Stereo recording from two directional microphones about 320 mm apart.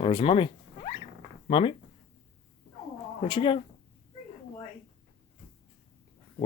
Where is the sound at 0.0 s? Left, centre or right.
Centre.